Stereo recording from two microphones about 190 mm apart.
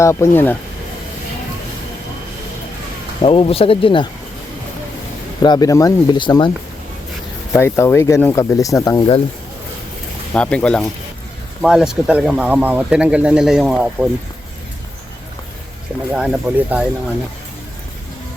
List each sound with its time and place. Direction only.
0.0 s speech: 15° left (ahead or behind)
3.2 s speech: 30° left (ahead or behind)
5.4 s speech: 20° left (ahead or behind)
7.5 s speech: 15° left (ahead or behind)
10.3 s speech: 5° left (ahead or behind)
16.1 s speech: 5° right (ahead or behind)